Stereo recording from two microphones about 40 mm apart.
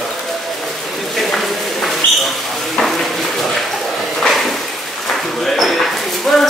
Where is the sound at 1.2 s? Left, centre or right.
Centre.